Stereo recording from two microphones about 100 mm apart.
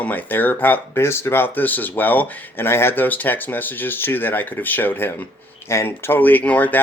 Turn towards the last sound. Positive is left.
turn(degrees=15)  # may be behind; listen again after turning